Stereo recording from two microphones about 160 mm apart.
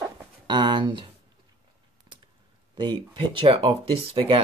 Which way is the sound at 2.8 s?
30° right (ahead or behind).